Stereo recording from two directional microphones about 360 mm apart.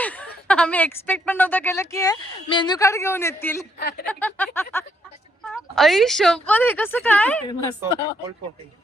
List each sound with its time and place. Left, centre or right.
0.4 s speech: centre
3.8 s speech: left
4.0 s speech: centre